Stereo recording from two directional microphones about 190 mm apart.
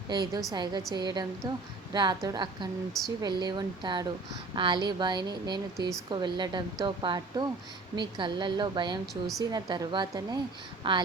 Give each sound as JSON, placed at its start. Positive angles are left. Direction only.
{"t": 0.1, "sound": "speech", "side_deg": -20}